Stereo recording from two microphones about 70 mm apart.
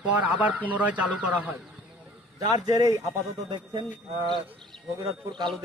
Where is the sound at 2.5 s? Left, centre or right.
Right.